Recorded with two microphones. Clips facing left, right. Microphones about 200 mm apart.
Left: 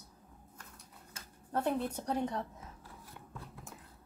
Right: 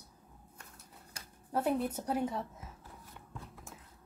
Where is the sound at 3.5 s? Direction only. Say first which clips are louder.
Left 1 dB; centre (ahead or behind).